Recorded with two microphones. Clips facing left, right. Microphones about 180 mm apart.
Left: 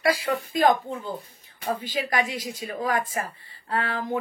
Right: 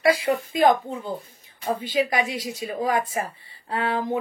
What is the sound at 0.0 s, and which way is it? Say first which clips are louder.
Speech: right 3 dB; 25° right (ahead or behind).